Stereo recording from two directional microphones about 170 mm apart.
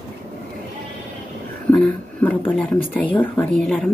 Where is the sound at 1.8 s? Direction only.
10° left (ahead or behind).